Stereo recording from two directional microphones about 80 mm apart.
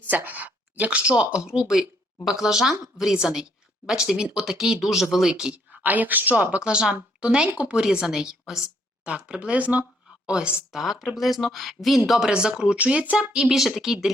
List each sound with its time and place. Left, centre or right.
0.1 s speech: right; by 14.1 s centre